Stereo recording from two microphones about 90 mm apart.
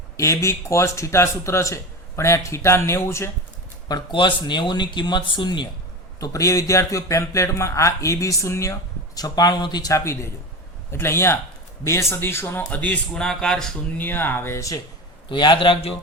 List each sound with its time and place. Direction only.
0.2 s a man's voice: 35° left (ahead or behind)
4.1 s speech: 65° left (ahead or behind)
6.1 s a man's voice: 40° left (ahead or behind)
9.9 s a man's voice: 35° left (ahead or behind)
12.7 s speech: 15° left (ahead or behind)
13.2 s speech: 5° left (ahead or behind)
14.0 s speech: 20° left (ahead or behind)
15.3 s a man's voice: 65° left (ahead or behind); by 16.0 s 85° left